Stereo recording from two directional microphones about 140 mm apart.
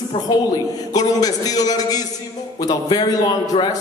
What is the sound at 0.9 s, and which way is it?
A man's voice, 25° left (ahead or behind).